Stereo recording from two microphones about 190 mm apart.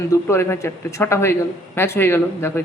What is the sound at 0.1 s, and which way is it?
A man's voice, 15° left (ahead or behind).